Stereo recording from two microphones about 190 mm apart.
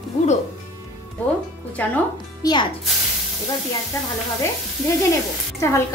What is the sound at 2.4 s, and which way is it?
Speech, 25° left (ahead or behind).